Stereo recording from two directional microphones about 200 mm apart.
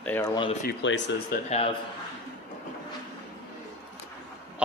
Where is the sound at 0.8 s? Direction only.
65° left (ahead or behind).